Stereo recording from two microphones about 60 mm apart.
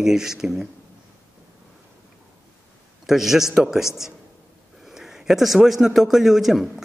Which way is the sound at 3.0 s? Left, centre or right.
Centre.